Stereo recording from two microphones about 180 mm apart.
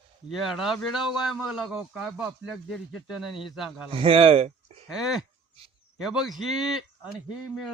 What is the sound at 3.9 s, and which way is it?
Speech, 30° right (ahead or behind).